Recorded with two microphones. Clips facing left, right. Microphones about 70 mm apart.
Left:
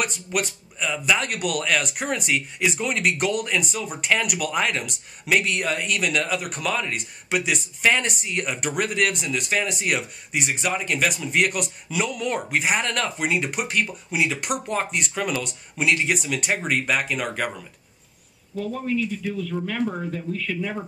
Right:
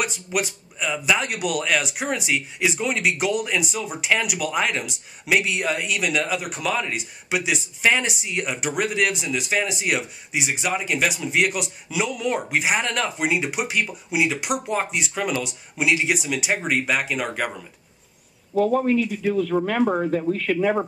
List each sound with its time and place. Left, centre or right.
0.0 s speech: centre
18.5 s speech: right